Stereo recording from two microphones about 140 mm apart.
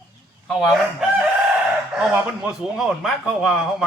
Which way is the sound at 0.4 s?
Centre (ahead or behind).